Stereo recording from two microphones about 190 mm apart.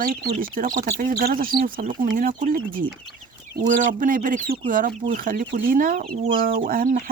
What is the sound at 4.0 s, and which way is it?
Speech, 45° right (ahead or behind).